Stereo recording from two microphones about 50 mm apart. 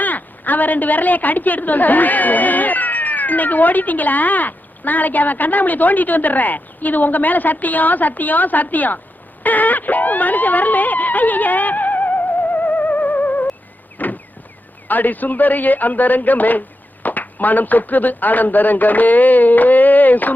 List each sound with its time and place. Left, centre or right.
0.0 s a woman's voice: left
9.4 s wail: left
14.0 s a sound: left
14.8 s a man's voice: left